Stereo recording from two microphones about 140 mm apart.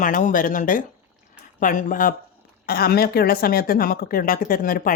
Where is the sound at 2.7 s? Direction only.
90° left.